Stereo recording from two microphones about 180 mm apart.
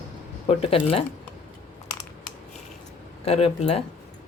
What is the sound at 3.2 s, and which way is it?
Speech, 35° left (ahead or behind).